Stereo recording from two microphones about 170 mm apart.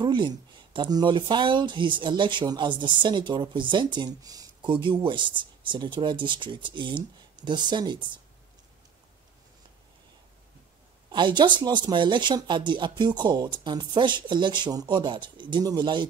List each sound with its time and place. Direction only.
0.0 s a woman's voice: 25° right (ahead or behind)
11.1 s a woman's voice: 30° right (ahead or behind)